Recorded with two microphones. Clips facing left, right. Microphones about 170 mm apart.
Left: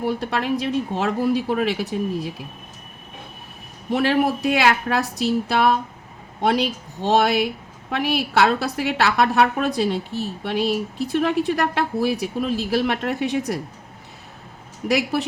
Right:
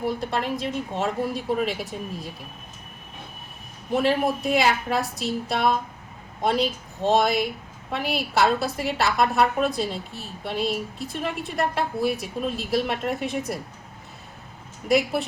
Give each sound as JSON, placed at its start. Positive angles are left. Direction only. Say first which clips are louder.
{"t": 0.0, "sound": "speech", "louder": "left 3 dB", "side_deg": 70}
{"t": 3.9, "sound": "speech", "louder": "left 2 dB", "side_deg": 75}
{"t": 14.8, "sound": "speech", "louder": "even", "side_deg": 75}